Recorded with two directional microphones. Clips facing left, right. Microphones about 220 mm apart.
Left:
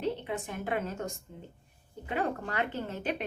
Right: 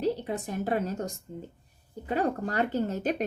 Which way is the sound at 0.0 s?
40° right (ahead or behind).